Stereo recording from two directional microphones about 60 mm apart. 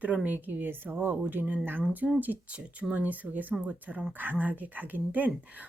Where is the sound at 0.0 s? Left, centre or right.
Right.